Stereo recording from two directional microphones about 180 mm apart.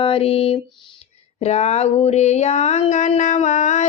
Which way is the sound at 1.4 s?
35° left (ahead or behind).